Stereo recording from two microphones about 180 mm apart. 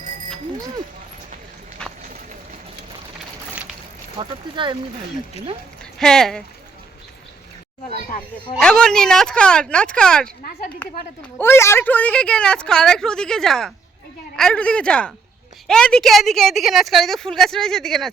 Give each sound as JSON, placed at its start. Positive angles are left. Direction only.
{"t": 1.8, "sound": "run", "side_deg": 5}
{"t": 4.2, "sound": "speech", "side_deg": -25}
{"t": 5.8, "sound": "speech", "side_deg": 5}
{"t": 8.5, "sound": "a woman's voice", "side_deg": 5}
{"t": 11.3, "sound": "a woman's voice", "side_deg": 15}